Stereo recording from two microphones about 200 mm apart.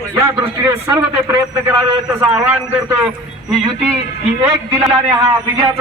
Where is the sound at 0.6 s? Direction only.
10° right (ahead or behind).